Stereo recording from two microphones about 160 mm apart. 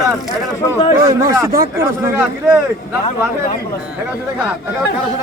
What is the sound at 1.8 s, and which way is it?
Speech, 10° right (ahead or behind).